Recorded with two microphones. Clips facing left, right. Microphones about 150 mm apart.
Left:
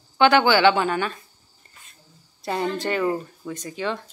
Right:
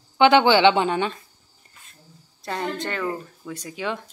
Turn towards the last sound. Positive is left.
turn(degrees=-10)  # may be behind; listen again after turning